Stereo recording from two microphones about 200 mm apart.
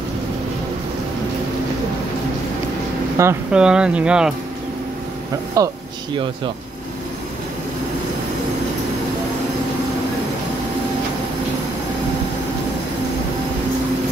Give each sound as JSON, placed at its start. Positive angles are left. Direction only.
{"t": 3.2, "sound": "speech", "side_deg": -10}
{"t": 5.6, "sound": "speech", "side_deg": -15}